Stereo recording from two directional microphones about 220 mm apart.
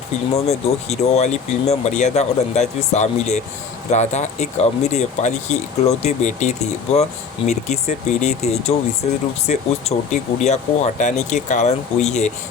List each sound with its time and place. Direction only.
0.3 s speech: 30° left (ahead or behind)